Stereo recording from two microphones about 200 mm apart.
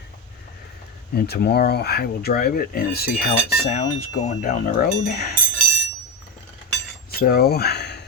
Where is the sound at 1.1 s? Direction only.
50° left (ahead or behind).